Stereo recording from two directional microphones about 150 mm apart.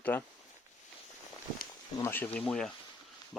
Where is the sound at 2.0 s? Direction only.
15° left (ahead or behind).